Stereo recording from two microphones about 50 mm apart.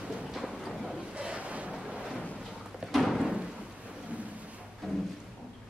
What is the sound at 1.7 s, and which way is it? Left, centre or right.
Waves, centre.